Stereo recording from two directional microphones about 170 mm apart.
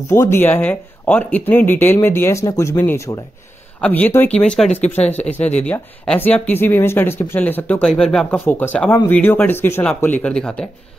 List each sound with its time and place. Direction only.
0.1 s speech: 15° left (ahead or behind)